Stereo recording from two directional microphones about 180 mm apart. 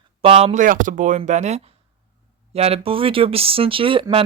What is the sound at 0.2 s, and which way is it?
Speech, 35° right (ahead or behind).